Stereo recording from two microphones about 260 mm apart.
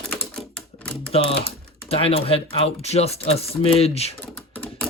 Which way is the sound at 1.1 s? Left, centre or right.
Left.